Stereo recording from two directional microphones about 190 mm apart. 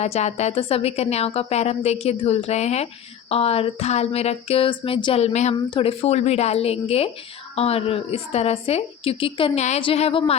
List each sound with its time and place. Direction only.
0.0 s a woman's voice: 35° left (ahead or behind)